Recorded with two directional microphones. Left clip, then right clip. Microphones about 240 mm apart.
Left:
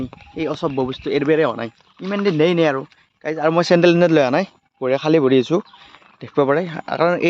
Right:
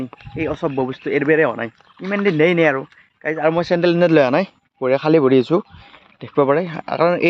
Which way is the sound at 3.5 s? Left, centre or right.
Left.